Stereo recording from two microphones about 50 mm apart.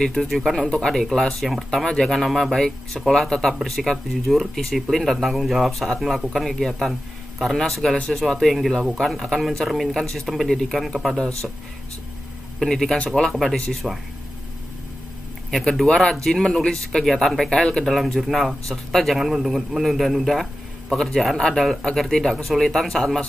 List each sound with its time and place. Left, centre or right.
0.0 s speech: centre
1.4 s speech: centre
1.7 s speech: centre
12.5 s speech: centre
13.8 s speech: centre
15.5 s speech: centre
17.8 s speech: centre
19.1 s speech: centre